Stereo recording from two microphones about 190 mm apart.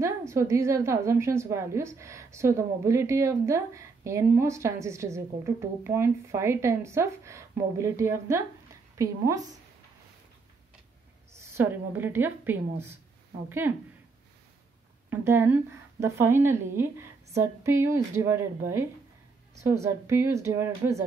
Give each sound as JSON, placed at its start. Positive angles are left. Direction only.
{"t": 0.3, "sound": "a woman's voice", "side_deg": -15}
{"t": 11.3, "sound": "a woman's voice", "side_deg": -10}
{"t": 15.0, "sound": "a woman's voice", "side_deg": -10}